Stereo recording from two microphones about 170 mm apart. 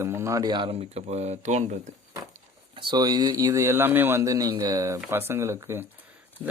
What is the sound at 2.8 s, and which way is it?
A man's voice, 25° right (ahead or behind).